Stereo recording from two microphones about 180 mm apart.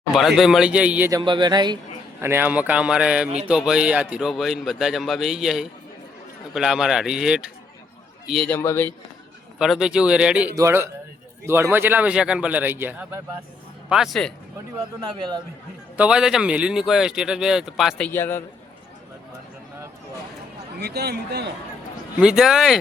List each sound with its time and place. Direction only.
0.1 s speech: centre (ahead or behind)
1.2 s speech: 25° right (ahead or behind)
2.2 s a man's voice: 10° right (ahead or behind)
8.5 s a man's voice: 15° left (ahead or behind)
9.6 s a man's voice: 5° right (ahead or behind)
13.9 s speech: centre (ahead or behind)
16.0 s speech: 5° right (ahead or behind); by 18.4 s 10° left (ahead or behind)
20.7 s a man's voice: 60° right (ahead or behind)
22.2 s speech: 5° right (ahead or behind)